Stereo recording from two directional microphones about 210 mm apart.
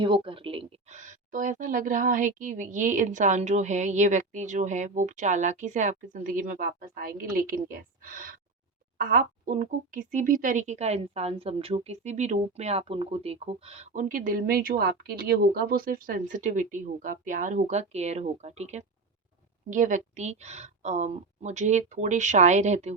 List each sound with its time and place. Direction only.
0.0 s speech: 25° right (ahead or behind)